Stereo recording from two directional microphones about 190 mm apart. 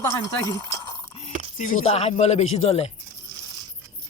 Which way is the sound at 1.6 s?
40° left (ahead or behind).